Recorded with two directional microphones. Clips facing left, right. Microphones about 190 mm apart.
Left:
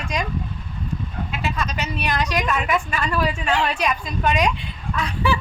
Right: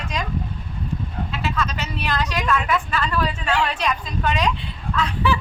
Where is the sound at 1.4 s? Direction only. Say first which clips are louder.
Even; 15° left (ahead or behind).